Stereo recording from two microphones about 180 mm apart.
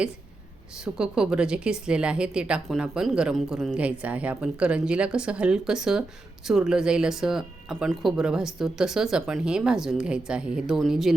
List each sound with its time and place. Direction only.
0.9 s a woman's voice: 5° right (ahead or behind)